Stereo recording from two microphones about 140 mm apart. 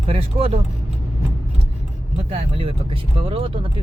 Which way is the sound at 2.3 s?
40° right (ahead or behind).